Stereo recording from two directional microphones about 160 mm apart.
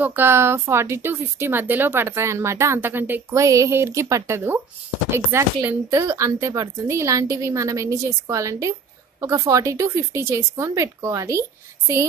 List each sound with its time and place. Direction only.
0.0 s speech: 15° right (ahead or behind)